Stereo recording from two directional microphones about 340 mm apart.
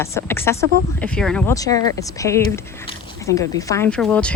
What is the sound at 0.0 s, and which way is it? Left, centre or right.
Speech, centre.